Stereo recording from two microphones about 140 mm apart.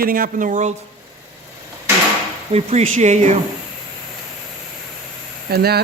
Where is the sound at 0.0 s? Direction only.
85° right; by 0.7 s 65° right (ahead or behind).